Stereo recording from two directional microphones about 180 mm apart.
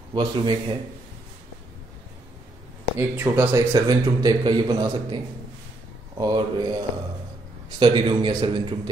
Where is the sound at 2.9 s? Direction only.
15° right (ahead or behind).